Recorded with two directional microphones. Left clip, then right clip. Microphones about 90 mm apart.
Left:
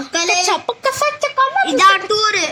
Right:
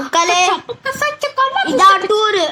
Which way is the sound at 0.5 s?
70° left (ahead or behind).